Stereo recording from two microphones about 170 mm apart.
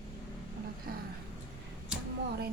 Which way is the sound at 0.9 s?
60° right (ahead or behind).